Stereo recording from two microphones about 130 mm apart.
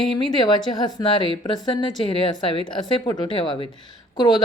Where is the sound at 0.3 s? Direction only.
35° left (ahead or behind).